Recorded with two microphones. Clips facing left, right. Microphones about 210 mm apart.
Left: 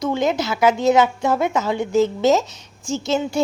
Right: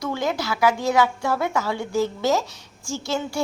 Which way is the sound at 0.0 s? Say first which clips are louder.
Left 5 dB; 20° left (ahead or behind).